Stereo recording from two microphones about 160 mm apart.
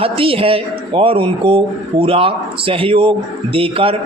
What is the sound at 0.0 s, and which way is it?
Speech, 35° right (ahead or behind).